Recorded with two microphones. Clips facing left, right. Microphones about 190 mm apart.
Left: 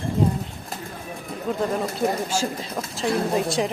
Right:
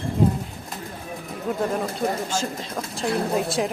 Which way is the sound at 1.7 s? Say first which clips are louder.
Left 1 dB; 5° left (ahead or behind).